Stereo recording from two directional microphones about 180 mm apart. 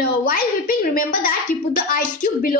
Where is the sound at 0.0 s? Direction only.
55° left (ahead or behind).